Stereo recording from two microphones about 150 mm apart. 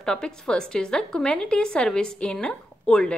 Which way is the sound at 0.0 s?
5° left (ahead or behind).